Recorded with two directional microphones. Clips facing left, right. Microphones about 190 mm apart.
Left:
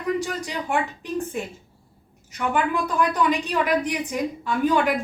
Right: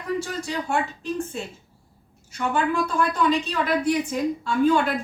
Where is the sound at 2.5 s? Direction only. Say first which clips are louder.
Even; 15° left (ahead or behind).